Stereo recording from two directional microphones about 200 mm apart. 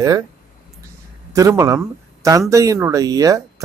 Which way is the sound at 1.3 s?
15° right (ahead or behind).